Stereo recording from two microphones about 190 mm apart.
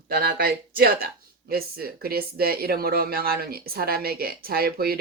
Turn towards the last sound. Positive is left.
turn(degrees=-55)  # may be behind; listen again after turning